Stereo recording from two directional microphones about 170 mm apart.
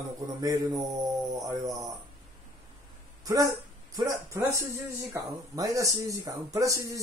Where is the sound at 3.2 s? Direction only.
20° right (ahead or behind).